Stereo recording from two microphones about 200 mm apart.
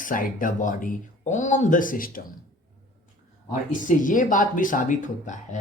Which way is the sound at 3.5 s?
40° left (ahead or behind).